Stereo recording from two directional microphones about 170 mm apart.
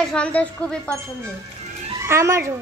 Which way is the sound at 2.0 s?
15° right (ahead or behind).